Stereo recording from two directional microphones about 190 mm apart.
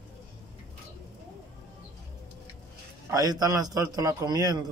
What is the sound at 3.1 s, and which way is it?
A man's voice, 20° right (ahead or behind).